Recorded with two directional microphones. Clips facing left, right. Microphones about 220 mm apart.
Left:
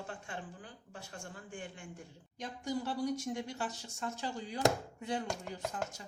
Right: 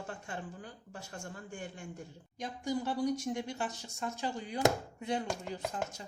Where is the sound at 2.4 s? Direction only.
15° right (ahead or behind).